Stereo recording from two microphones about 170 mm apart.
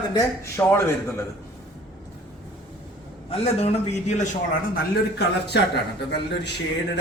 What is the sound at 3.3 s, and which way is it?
Speech, 40° left (ahead or behind).